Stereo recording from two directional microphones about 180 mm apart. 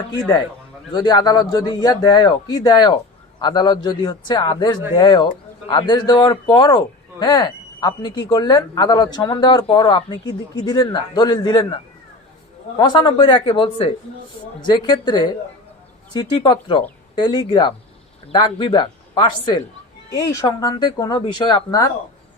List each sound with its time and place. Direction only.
0.9 s a man's voice: 25° left (ahead or behind)
12.8 s a man's voice: 25° left (ahead or behind)